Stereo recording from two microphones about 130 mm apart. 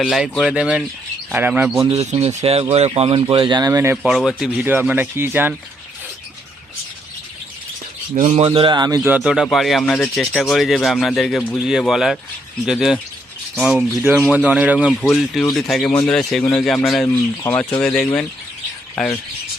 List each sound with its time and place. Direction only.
0.0 s speech: centre (ahead or behind)
1.9 s speech: 55° right (ahead or behind); by 3.7 s 40° right (ahead or behind)
3.7 s speech: 25° right (ahead or behind)
4.0 s speech: 5° right (ahead or behind)
8.1 s speech: 60° right (ahead or behind); by 9.0 s 35° right (ahead or behind)
9.0 s speech: 5° right (ahead or behind)
15.0 s speech: centre (ahead or behind)
18.9 s speech: 15° left (ahead or behind)